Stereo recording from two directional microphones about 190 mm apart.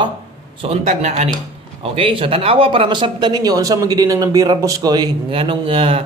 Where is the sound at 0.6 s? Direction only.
35° right (ahead or behind).